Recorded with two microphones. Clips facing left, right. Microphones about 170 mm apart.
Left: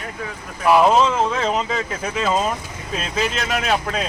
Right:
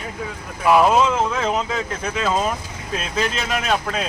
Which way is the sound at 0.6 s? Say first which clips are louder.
Left 1 dB; centre (ahead or behind).